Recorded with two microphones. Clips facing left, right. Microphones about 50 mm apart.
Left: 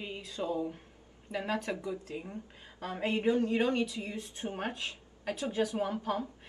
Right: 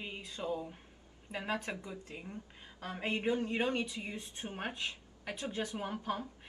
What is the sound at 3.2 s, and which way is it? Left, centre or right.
Speech, right.